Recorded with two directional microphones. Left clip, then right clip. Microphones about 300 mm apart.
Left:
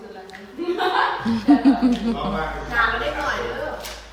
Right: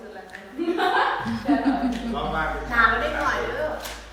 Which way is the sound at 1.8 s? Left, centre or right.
Centre.